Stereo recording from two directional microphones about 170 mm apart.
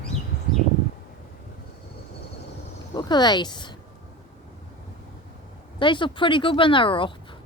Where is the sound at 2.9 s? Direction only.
25° left (ahead or behind).